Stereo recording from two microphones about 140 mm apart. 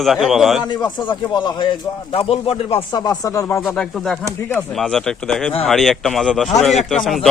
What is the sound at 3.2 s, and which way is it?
Speech, 25° left (ahead or behind).